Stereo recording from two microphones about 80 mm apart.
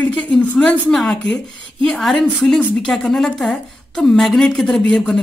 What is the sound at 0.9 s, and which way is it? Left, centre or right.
A woman's voice, centre.